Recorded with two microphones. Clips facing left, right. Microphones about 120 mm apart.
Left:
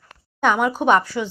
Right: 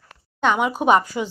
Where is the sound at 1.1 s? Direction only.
20° right (ahead or behind).